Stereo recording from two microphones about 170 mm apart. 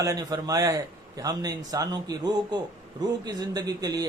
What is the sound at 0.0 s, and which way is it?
Speech, 20° right (ahead or behind).